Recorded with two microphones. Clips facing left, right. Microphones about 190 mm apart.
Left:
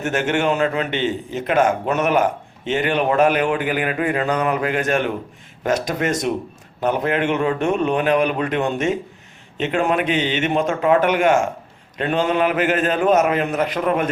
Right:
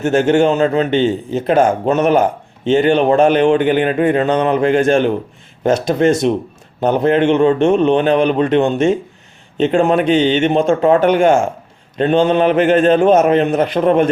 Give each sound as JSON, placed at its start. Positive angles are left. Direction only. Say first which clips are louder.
{"t": 0.0, "sound": "a man's voice", "louder": "right 8 dB", "side_deg": -30}